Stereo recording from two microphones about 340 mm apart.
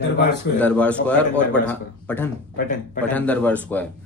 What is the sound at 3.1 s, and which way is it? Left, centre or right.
Speech, centre.